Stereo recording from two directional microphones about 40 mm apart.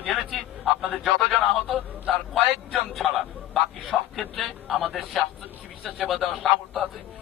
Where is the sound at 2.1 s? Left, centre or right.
Centre.